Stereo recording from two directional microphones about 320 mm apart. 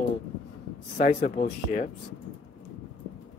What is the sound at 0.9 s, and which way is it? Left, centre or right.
Speech, left.